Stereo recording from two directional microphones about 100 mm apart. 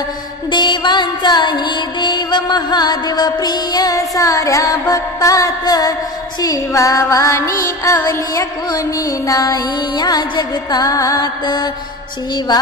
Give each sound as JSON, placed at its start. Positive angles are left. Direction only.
{"t": 0.5, "sound": "music", "side_deg": 50}